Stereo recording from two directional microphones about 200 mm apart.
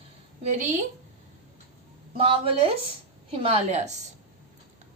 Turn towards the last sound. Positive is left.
turn(degrees=-35)  # may be behind; listen again after turning